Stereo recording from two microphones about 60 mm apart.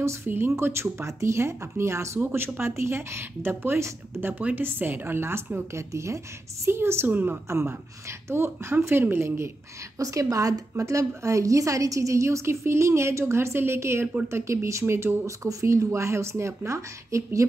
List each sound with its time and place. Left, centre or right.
0.0 s speech: right
2.1 s a woman's voice: right
5.8 s speech: right
7.1 s a woman's voice: right
7.4 s speech: right
9.9 s a woman's voice: right